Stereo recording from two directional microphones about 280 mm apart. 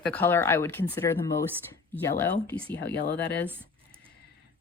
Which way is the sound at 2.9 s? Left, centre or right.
Left.